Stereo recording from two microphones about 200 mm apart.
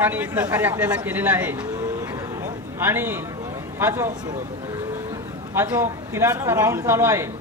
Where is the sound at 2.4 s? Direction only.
10° right (ahead or behind).